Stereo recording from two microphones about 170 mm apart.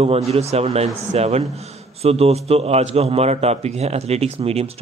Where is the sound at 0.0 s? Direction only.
35° right (ahead or behind).